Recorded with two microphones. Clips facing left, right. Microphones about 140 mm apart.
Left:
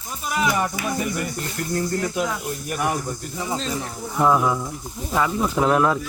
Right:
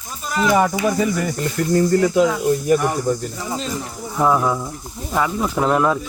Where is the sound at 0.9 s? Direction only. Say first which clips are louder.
Right 6 dB; 90° right.